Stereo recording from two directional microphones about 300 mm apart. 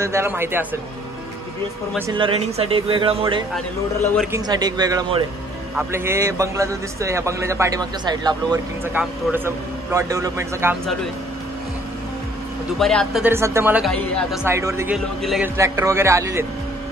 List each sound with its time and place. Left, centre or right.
0.0 s a man's voice: centre
2.0 s a man's voice: centre
12.7 s a man's voice: centre